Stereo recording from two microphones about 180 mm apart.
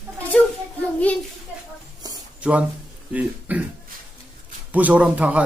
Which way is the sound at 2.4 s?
5° right (ahead or behind).